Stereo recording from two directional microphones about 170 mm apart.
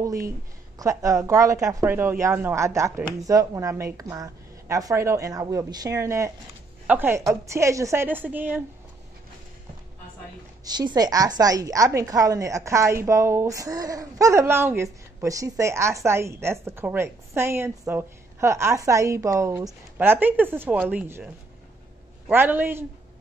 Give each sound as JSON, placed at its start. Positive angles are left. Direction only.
{"t": 0.7, "sound": "a woman's voice", "side_deg": -20}
{"t": 10.6, "sound": "a woman's voice", "side_deg": -25}
{"t": 22.3, "sound": "a woman's voice", "side_deg": -10}